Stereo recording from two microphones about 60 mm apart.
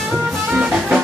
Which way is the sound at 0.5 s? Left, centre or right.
Centre.